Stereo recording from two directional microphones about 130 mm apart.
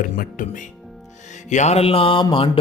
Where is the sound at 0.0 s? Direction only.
90° left.